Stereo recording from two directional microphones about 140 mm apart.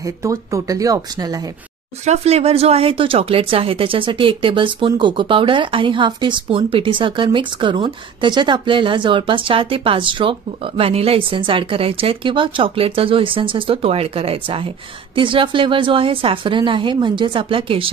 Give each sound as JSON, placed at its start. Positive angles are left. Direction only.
{"t": 0.0, "sound": "speech", "side_deg": -20}
{"t": 2.0, "sound": "speech", "side_deg": -50}